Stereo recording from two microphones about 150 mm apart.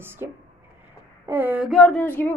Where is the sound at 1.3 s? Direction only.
10° right (ahead or behind).